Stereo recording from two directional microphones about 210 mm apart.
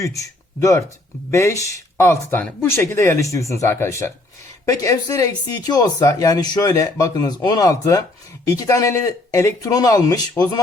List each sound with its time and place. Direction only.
0.0 s speech: 15° left (ahead or behind)